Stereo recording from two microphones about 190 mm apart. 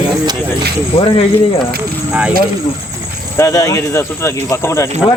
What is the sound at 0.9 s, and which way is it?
Speech, 30° left (ahead or behind).